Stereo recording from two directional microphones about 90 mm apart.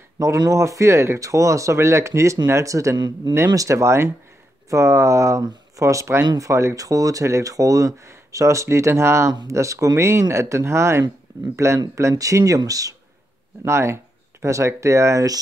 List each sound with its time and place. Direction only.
0.5 s speech: 35° right (ahead or behind)